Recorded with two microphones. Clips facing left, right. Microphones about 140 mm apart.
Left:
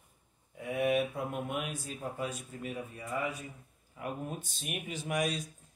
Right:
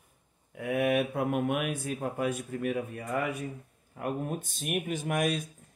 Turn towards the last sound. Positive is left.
turn(degrees=-55)  # may be behind; listen again after turning